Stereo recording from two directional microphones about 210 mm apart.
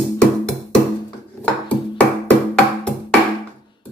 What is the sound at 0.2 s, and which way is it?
Music, 5° left (ahead or behind).